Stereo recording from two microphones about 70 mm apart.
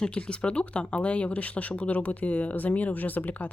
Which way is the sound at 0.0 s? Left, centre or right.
Centre.